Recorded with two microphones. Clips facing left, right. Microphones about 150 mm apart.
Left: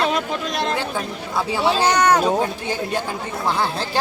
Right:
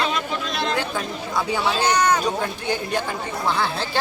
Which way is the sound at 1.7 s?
30° left (ahead or behind).